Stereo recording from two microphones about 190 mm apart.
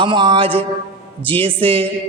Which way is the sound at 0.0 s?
25° right (ahead or behind).